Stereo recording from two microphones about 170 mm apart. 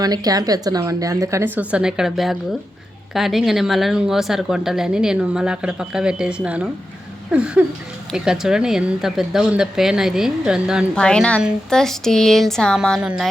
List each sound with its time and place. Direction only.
0.0 s speech: 25° right (ahead or behind); by 6.7 s 5° right (ahead or behind)
7.3 s a sound: 5° right (ahead or behind)
8.1 s speech: 5° right (ahead or behind)